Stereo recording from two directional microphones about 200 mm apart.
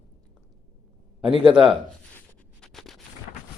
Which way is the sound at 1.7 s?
5° left (ahead or behind).